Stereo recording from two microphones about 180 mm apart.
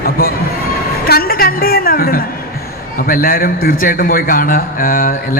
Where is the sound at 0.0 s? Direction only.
55° left (ahead or behind).